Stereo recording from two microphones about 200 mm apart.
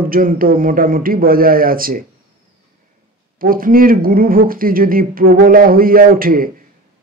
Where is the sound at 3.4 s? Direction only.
45° right (ahead or behind).